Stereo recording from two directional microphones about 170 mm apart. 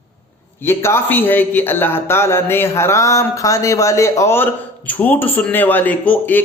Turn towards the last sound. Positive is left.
turn(degrees=10)  # may be behind; listen again after turning